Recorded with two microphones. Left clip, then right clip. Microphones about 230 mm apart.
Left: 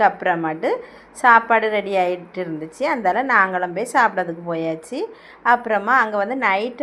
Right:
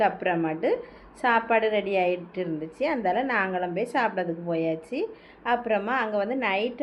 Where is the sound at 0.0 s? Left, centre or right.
Centre.